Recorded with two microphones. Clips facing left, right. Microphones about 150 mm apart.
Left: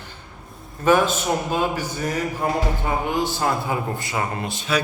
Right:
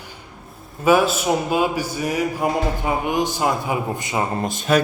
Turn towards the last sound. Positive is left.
turn(degrees=-50)  # may be behind; listen again after turning